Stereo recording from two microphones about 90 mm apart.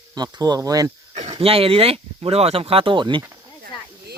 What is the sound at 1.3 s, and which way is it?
Speech, 90° right.